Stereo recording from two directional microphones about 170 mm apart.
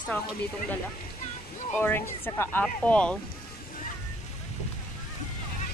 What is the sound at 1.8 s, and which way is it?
Speech, 15° left (ahead or behind).